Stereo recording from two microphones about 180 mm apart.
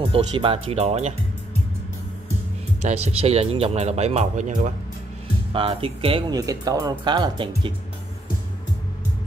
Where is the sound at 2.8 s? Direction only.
35° right (ahead or behind).